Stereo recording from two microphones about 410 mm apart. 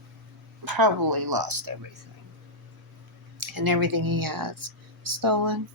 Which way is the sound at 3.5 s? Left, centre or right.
Right.